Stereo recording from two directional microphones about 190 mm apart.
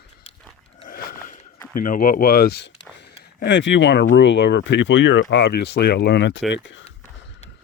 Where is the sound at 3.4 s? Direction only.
70° left (ahead or behind).